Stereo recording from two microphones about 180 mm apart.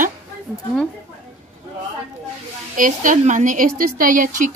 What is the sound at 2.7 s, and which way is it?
A woman's voice, 45° right (ahead or behind).